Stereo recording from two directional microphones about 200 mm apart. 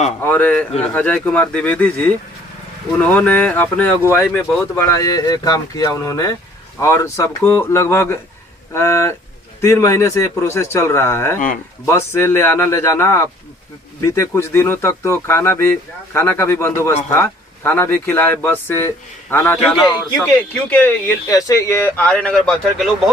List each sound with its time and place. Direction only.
0.2 s speech: 10° left (ahead or behind)